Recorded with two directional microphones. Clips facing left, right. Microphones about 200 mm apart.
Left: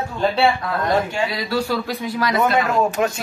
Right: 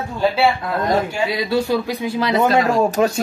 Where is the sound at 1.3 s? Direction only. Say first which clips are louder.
Right 4 dB; 20° right (ahead or behind).